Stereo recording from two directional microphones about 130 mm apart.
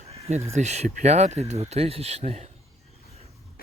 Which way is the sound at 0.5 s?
60° right (ahead or behind).